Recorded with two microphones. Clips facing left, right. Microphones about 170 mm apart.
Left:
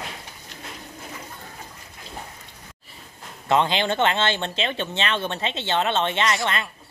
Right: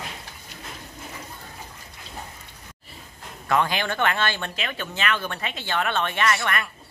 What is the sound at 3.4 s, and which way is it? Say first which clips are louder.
Speech: left 3 dB; 25° left (ahead or behind).